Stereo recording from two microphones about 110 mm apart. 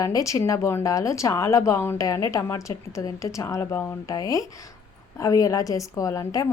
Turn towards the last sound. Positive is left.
turn(degrees=30)  # may be behind; listen again after turning